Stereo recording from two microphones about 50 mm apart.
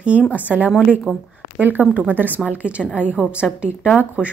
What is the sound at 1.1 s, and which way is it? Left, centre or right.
Speech, centre.